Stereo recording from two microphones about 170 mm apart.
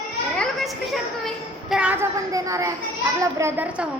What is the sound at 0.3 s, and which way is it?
A woman's voice, centre (ahead or behind).